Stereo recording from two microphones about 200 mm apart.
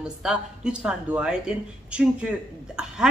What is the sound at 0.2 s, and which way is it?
Speech, 5° right (ahead or behind).